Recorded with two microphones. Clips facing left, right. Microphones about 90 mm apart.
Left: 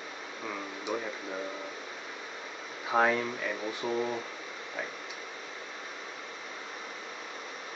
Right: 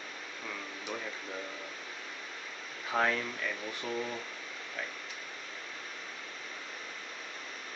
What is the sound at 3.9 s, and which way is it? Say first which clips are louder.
Speech: left 5 dB; 30° left (ahead or behind).